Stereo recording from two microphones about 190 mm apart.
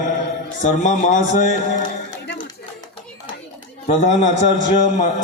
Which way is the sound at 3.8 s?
40° left (ahead or behind).